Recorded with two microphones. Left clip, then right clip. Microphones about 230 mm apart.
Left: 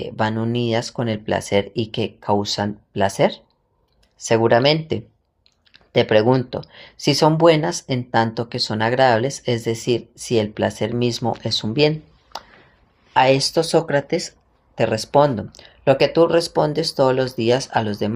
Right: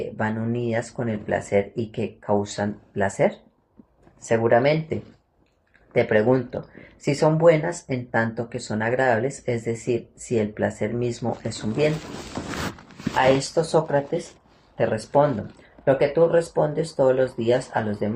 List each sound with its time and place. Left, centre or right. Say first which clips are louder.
0.2 s speech: left 7 dB; left
6.0 s speech: left 4 dB; left
13.1 s speech: left 4 dB; left